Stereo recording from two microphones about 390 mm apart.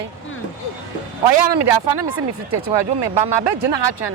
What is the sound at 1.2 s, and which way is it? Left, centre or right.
Speech, right.